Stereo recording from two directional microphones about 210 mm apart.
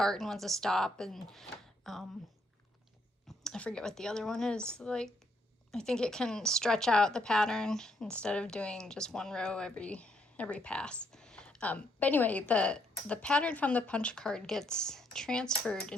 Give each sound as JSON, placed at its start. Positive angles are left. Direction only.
{"t": 0.0, "sound": "speech", "side_deg": 0}
{"t": 3.2, "sound": "speech", "side_deg": 5}